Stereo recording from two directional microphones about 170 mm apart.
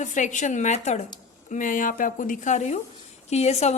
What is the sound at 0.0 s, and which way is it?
A woman's voice, 45° left (ahead or behind).